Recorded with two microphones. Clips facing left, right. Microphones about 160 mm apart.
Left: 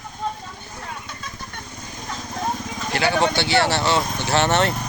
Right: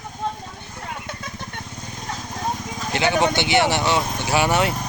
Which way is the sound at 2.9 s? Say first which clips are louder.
Right 1 dB; 20° right (ahead or behind).